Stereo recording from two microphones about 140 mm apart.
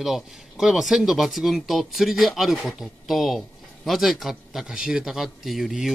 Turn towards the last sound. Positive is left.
turn(degrees=0)  # may be behind; listen again after turning